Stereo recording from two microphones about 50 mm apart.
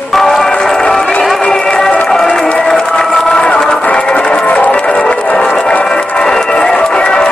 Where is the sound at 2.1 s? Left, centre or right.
Centre.